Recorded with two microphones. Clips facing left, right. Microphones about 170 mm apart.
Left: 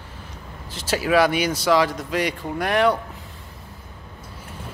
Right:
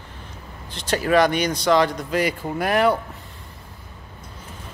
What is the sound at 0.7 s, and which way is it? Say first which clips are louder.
Speech: right 1 dB; 5° left (ahead or behind).